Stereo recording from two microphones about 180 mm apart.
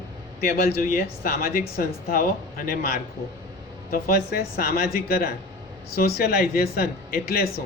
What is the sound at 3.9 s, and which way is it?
Speech, 55° left (ahead or behind).